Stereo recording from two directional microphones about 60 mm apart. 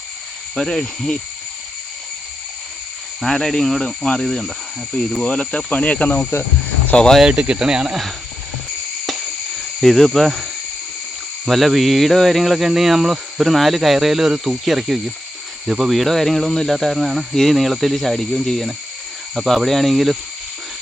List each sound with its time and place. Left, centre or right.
0.5 s speech: centre
3.2 s speech: centre
5.7 s cricket: left
6.9 s speech: centre
7.2 s speech: centre
9.0 s cricket: centre
11.4 s speech: centre